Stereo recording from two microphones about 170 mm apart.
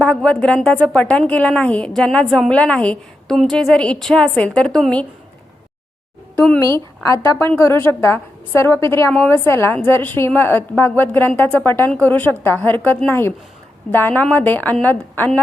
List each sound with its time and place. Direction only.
0.0 s speech: 5° left (ahead or behind)
7.3 s a woman's voice: 15° left (ahead or behind)